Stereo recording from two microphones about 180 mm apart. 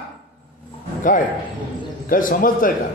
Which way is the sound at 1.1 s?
45° left (ahead or behind).